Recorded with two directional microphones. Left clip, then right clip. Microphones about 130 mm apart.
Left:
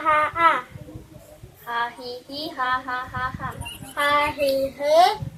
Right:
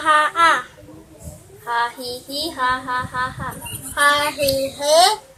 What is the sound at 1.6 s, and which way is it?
A child's voice, 70° right (ahead or behind).